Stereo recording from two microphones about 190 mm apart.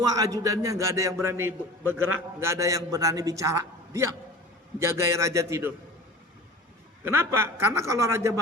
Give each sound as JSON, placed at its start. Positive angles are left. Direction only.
{"t": 0.0, "sound": "a man's voice", "side_deg": -20}
{"t": 2.0, "sound": "a man's voice", "side_deg": -90}
{"t": 2.4, "sound": "a man's voice", "side_deg": -15}
{"t": 7.0, "sound": "a man's voice", "side_deg": -10}